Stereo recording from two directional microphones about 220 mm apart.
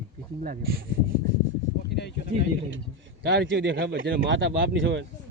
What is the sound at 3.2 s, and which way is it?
Speech, 50° right (ahead or behind).